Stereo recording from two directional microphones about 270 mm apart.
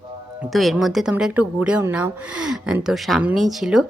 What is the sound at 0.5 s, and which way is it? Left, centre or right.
Speech, centre.